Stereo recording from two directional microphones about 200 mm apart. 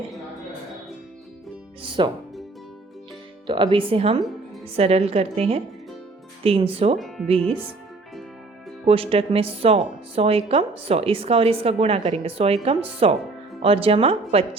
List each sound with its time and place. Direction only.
1.8 s speech: 25° right (ahead or behind)
3.4 s a woman's voice: 25° right (ahead or behind)
8.9 s speech: 30° right (ahead or behind)